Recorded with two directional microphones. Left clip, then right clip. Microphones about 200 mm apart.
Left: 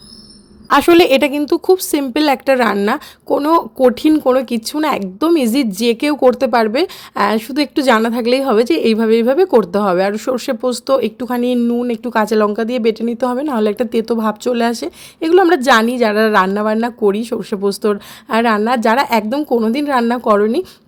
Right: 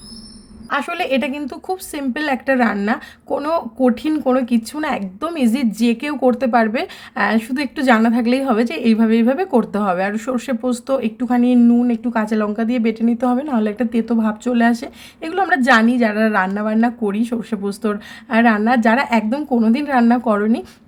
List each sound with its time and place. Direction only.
0.7 s a woman's voice: 45° left (ahead or behind); by 20.7 s 30° left (ahead or behind)